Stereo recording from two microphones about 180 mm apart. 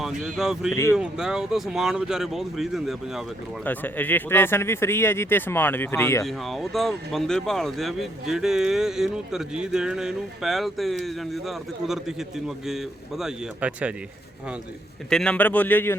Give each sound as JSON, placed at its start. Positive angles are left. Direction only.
{"t": 0.0, "sound": "speech", "side_deg": 0}
{"t": 3.6, "sound": "speech", "side_deg": 10}
{"t": 6.2, "sound": "speech", "side_deg": 0}
{"t": 15.1, "sound": "speech", "side_deg": 5}